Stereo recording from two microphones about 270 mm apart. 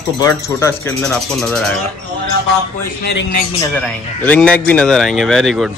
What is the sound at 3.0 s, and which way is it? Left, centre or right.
Speech, left.